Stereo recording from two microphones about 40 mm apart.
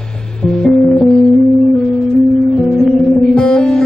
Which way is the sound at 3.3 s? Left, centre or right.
Left.